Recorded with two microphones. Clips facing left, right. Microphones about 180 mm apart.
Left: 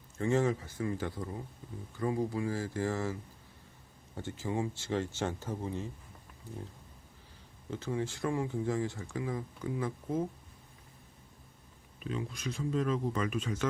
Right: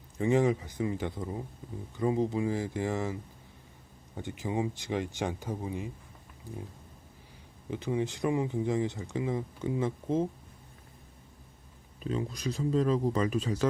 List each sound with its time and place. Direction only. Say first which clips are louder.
0.2 s speech: right 3 dB; 15° right (ahead or behind)
4.2 s speech: right 2 dB; 15° right (ahead or behind)
7.7 s speech: right 4 dB; 15° right (ahead or behind)
11.9 s speech: right 4 dB; 35° right (ahead or behind)